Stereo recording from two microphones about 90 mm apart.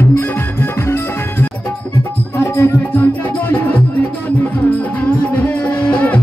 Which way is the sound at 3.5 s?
20° left (ahead or behind).